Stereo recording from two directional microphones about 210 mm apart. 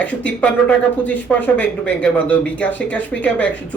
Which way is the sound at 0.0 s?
5° left (ahead or behind).